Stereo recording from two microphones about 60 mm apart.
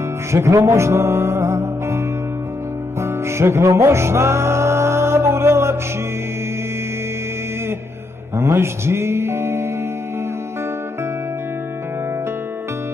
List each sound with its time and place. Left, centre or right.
0.3 s music: right
8.4 s speech: right